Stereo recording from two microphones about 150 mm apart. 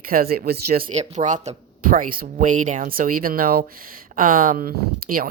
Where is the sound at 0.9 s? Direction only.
55° right (ahead or behind).